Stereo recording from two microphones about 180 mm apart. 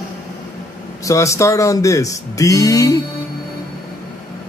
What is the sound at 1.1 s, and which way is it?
Speech, 15° left (ahead or behind).